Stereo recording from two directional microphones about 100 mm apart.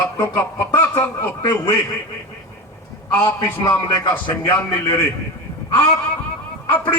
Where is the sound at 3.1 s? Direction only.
20° left (ahead or behind).